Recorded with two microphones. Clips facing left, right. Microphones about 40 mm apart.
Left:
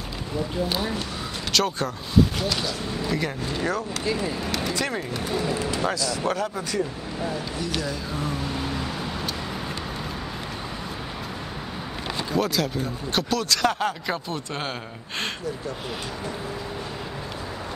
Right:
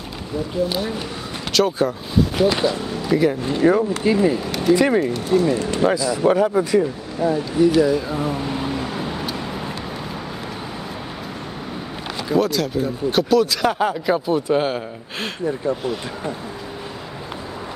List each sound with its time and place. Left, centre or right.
0.7 s speech: centre
2.3 s speech: right
3.1 s speech: centre
3.4 s speech: centre
5.0 s speech: centre
5.7 s speech: centre
12.3 s speech: centre